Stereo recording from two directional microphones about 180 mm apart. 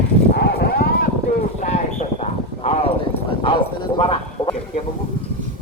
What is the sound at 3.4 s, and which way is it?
Bow-wow, 30° left (ahead or behind).